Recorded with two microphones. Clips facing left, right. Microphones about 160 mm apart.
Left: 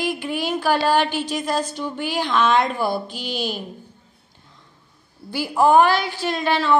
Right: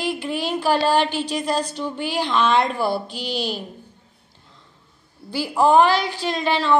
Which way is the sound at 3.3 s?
50° left (ahead or behind).